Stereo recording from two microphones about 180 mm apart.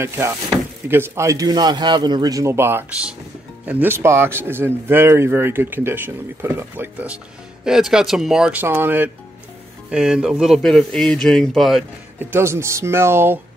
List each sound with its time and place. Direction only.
0.0 s a man's voice: 15° right (ahead or behind)
12.2 s speech: 15° right (ahead or behind)